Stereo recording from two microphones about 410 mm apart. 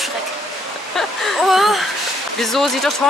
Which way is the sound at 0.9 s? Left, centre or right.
Centre.